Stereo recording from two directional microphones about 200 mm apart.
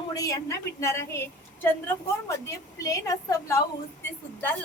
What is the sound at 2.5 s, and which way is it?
A woman's voice, 15° left (ahead or behind).